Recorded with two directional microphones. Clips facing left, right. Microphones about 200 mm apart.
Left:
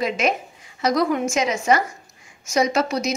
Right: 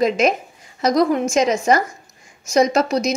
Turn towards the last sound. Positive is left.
turn(degrees=-40)  # may be behind; listen again after turning